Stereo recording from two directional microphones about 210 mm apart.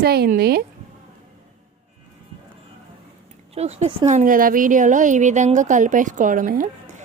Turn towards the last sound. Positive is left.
turn(degrees=-40)  # may be behind; listen again after turning